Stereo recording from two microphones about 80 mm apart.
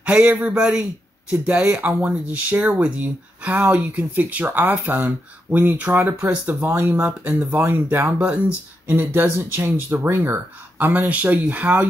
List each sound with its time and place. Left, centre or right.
0.0 s speech: centre